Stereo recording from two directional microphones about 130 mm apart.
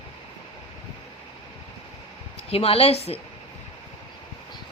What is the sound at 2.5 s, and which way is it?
Speech, 50° left (ahead or behind).